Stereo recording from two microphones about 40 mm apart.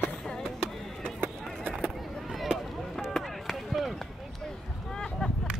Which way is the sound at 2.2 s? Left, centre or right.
Centre.